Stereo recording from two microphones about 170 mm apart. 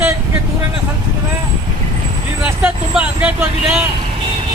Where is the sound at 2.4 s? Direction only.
10° right (ahead or behind).